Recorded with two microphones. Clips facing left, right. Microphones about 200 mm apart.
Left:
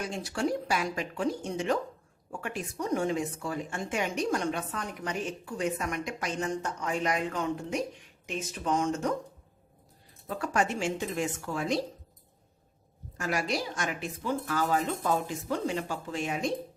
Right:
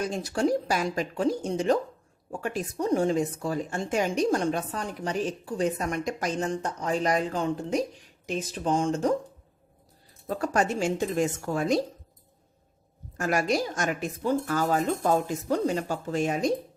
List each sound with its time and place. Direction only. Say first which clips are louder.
0.0 s a woman's voice: right 5 dB; 40° right (ahead or behind)
10.2 s a woman's voice: right 3 dB; 40° right (ahead or behind)
13.1 s speech: right 5 dB; 50° right (ahead or behind)